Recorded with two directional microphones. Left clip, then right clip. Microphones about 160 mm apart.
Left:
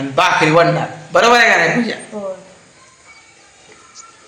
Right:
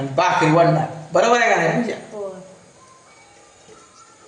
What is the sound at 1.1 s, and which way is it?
Speech, 10° left (ahead or behind).